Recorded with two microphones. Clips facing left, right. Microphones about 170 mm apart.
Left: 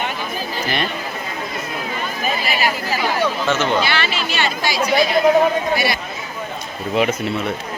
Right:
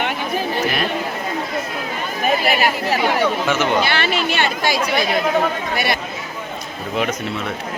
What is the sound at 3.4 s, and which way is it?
Speech, 10° right (ahead or behind).